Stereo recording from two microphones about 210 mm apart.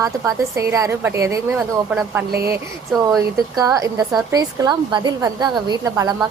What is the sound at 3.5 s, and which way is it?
A woman's voice, 15° right (ahead or behind).